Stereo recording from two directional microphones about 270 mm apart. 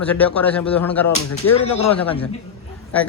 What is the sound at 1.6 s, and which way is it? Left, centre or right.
Speech, left.